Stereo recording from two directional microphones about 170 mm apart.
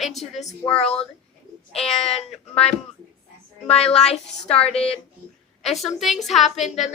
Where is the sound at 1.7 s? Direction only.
35° left (ahead or behind).